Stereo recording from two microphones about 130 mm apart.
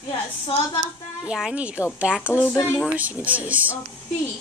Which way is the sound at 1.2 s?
5° right (ahead or behind).